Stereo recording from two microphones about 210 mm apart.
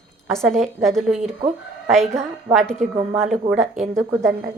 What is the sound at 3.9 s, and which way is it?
Speech, 10° right (ahead or behind).